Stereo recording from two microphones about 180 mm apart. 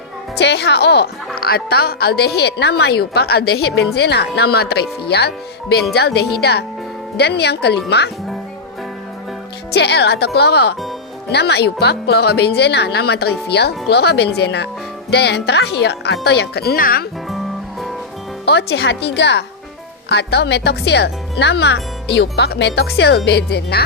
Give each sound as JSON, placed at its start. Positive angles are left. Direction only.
{"t": 0.3, "sound": "a woman's voice", "side_deg": 70}
{"t": 9.7, "sound": "a woman's voice", "side_deg": 65}
{"t": 17.2, "sound": "music", "side_deg": 0}
{"t": 18.4, "sound": "speech", "side_deg": 65}